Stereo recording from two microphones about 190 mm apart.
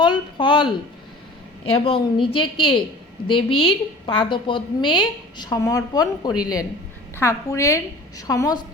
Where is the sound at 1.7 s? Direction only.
30° left (ahead or behind).